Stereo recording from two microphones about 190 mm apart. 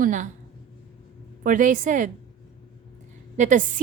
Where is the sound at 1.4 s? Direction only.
45° right (ahead or behind).